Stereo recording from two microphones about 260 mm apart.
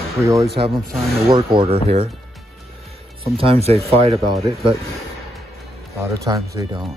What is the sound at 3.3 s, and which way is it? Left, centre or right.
Speech, right.